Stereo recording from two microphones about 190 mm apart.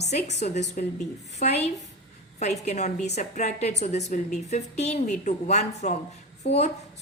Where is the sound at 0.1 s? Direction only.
35° left (ahead or behind).